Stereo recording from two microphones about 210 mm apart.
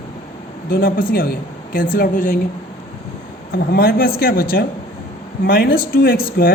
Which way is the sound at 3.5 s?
50° left (ahead or behind).